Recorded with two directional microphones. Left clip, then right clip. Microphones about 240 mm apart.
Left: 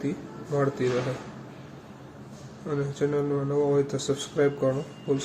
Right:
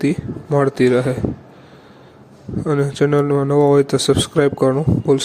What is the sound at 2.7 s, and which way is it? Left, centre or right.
Speech, right.